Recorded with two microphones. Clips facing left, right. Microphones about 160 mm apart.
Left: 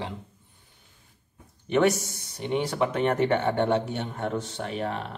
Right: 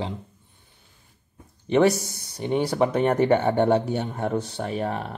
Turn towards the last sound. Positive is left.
turn(degrees=-40)  # may be behind; listen again after turning